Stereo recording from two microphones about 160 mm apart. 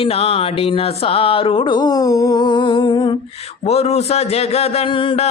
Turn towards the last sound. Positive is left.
turn(degrees=35)  # may be behind; listen again after turning